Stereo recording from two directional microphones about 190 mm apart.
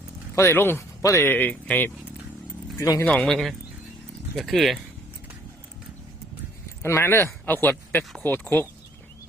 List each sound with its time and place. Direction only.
0.3 s speech: 15° left (ahead or behind)
3.1 s speech: 5° left (ahead or behind)
6.8 s speech: 15° left (ahead or behind)